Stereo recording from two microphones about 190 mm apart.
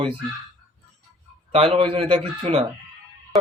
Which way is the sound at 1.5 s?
30° right (ahead or behind).